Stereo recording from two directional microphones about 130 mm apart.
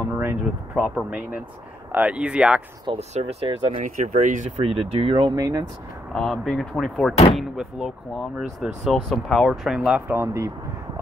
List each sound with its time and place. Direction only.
0.2 s speech: 15° right (ahead or behind)
2.9 s speech: 55° right (ahead or behind)
3.8 s speech: 70° right (ahead or behind)
4.6 s speech: 50° right (ahead or behind); by 5.7 s 30° right (ahead or behind)
6.1 s speech: centre (ahead or behind); by 10.5 s 20° right (ahead or behind)